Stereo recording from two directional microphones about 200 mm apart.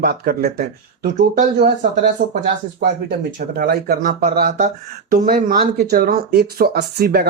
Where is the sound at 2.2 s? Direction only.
55° right (ahead or behind).